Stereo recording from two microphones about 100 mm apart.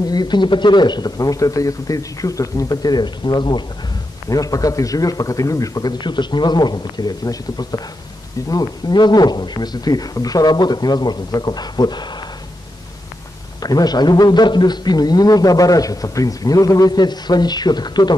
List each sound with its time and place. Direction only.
0.0 s speech: 45° left (ahead or behind)
4.3 s a man's voice: 35° left (ahead or behind)
13.6 s a man's voice: 40° left (ahead or behind)